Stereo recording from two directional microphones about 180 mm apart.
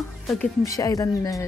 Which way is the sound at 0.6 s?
20° left (ahead or behind).